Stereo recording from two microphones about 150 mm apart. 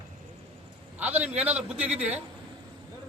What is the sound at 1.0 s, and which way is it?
A man's voice, 10° right (ahead or behind).